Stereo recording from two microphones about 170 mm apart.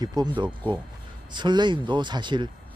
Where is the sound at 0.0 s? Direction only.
25° right (ahead or behind).